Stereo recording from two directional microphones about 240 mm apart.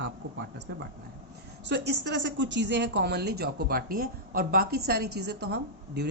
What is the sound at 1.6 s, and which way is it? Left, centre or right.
Speech, right.